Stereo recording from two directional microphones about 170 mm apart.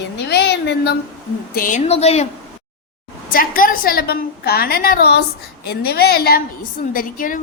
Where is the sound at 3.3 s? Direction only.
55° left (ahead or behind).